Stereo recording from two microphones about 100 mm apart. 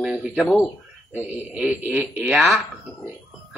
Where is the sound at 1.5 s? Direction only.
15° right (ahead or behind).